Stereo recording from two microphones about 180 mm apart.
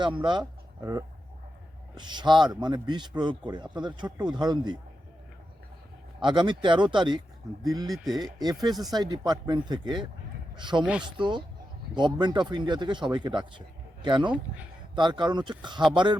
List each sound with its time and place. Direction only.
0.0 s speech: 25° right (ahead or behind)
6.2 s speech: 25° right (ahead or behind)
7.9 s speech: centre (ahead or behind)
8.2 s speech: 20° right (ahead or behind)